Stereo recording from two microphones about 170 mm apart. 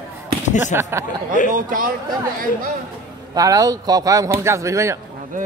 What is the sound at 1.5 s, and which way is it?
Speech, 55° right (ahead or behind).